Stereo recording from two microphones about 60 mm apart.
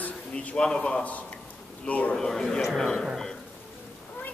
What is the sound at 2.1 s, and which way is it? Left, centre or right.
Speech, centre.